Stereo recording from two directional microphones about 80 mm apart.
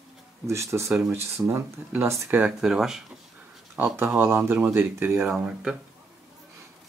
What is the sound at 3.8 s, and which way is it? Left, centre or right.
Speech, right.